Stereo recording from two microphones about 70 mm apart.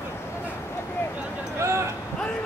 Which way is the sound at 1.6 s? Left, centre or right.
Right.